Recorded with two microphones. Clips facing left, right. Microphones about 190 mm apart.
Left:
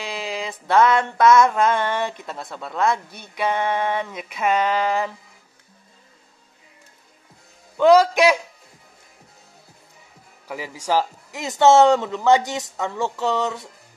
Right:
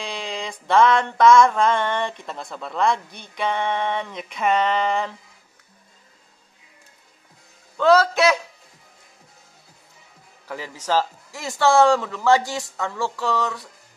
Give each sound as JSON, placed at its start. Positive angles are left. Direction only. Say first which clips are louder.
{"t": 0.0, "sound": "a sound", "louder": "left 1 dB", "side_deg": 5}
{"t": 7.7, "sound": "a man's voice", "louder": "left 3 dB", "side_deg": 15}
{"t": 10.5, "sound": "speech", "louder": "left 1 dB", "side_deg": 10}